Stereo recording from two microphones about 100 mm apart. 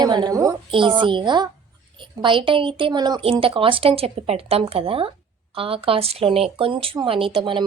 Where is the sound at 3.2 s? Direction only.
65° right (ahead or behind).